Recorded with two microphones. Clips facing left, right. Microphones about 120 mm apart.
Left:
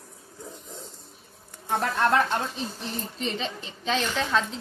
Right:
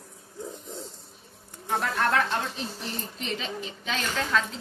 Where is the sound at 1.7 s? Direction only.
30° left (ahead or behind).